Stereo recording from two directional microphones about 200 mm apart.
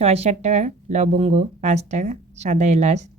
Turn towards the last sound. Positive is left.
turn(degrees=-35)  # may be behind; listen again after turning